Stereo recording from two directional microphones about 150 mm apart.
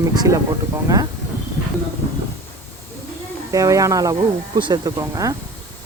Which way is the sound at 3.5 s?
25° right (ahead or behind).